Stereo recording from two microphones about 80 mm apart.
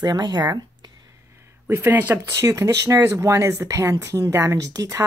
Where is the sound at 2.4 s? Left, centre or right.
Right.